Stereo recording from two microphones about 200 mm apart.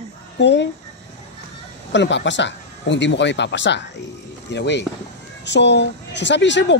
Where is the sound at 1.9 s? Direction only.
65° left (ahead or behind).